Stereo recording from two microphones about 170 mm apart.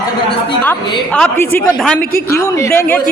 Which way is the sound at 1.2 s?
10° left (ahead or behind).